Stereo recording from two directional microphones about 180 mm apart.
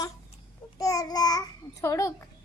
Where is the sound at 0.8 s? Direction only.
20° left (ahead or behind).